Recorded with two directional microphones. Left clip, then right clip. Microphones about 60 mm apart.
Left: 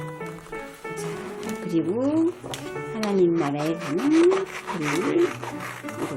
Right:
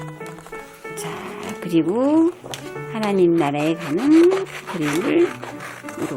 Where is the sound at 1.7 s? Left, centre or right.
Right.